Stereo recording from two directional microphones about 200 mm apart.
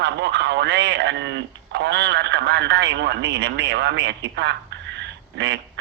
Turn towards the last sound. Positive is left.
turn(degrees=-60)  # may be behind; listen again after turning